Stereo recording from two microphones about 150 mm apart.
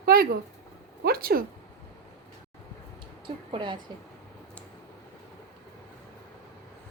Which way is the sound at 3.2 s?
35° right (ahead or behind).